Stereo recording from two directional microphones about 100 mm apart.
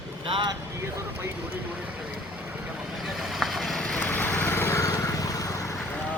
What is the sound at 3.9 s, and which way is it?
Vehicle, 20° left (ahead or behind).